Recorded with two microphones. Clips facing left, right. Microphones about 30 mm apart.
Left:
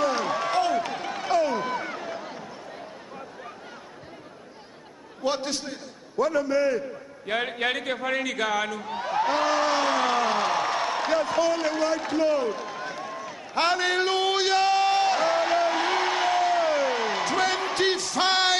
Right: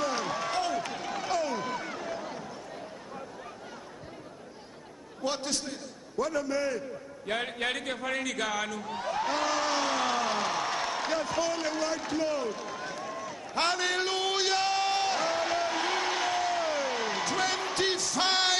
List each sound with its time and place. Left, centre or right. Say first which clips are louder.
0.0 s run: left 6 dB; centre
5.2 s a man's voice: left 5 dB; centre
7.2 s a sound: left 5 dB; centre